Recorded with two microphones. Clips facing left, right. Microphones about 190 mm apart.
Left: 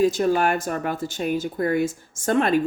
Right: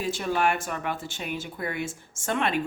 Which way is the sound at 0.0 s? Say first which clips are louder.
Left 7 dB; 40° left (ahead or behind).